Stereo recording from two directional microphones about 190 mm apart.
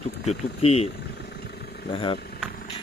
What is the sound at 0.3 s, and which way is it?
Speech, 35° left (ahead or behind).